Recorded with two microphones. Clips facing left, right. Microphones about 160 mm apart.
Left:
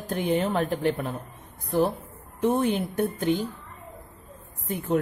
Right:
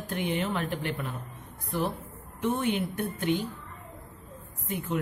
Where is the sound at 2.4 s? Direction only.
35° left (ahead or behind).